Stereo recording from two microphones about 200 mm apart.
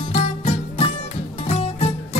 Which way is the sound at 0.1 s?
30° left (ahead or behind).